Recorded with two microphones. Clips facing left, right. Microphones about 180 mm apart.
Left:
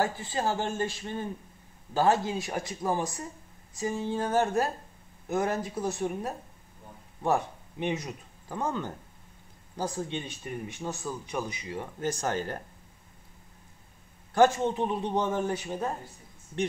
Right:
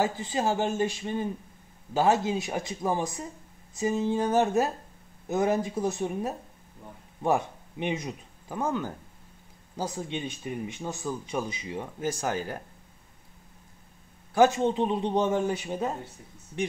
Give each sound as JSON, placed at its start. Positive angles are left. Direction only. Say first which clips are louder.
{"t": 0.0, "sound": "speech", "louder": "right 2 dB", "side_deg": -15}
{"t": 12.0, "sound": "speech", "louder": "even", "side_deg": -5}
{"t": 14.5, "sound": "speech", "louder": "right 3 dB", "side_deg": -20}